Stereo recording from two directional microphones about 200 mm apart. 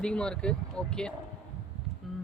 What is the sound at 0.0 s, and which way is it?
Speech, 5° left (ahead or behind).